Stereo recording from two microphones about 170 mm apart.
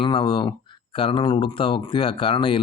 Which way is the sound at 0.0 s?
30° left (ahead or behind).